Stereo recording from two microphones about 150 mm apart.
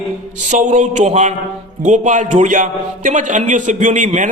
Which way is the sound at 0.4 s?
55° right (ahead or behind).